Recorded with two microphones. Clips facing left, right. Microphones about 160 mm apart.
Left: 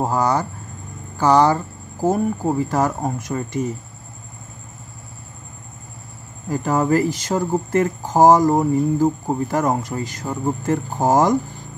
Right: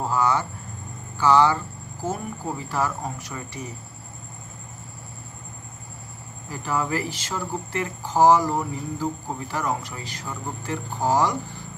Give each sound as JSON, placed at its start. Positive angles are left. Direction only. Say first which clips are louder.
{"t": 0.0, "sound": "speech", "louder": "left 4 dB", "side_deg": 40}
{"t": 6.5, "sound": "speech", "louder": "left 8 dB", "side_deg": 45}